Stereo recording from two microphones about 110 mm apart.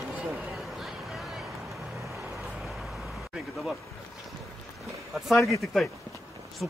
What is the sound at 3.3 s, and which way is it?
Speech, 5° right (ahead or behind).